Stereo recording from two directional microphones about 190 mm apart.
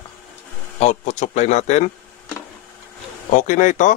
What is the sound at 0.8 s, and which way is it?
Speech, 40° left (ahead or behind).